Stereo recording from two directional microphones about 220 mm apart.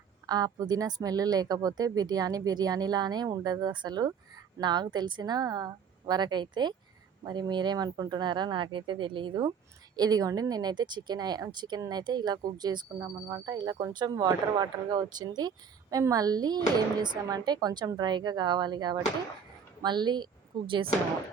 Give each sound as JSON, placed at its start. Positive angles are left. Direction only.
{"t": 0.3, "sound": "speech", "side_deg": -15}